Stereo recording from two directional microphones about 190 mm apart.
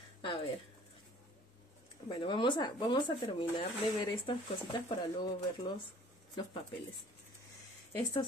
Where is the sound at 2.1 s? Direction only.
25° left (ahead or behind).